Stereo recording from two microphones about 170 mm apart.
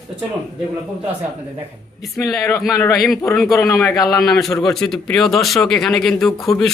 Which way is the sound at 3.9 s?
20° left (ahead or behind).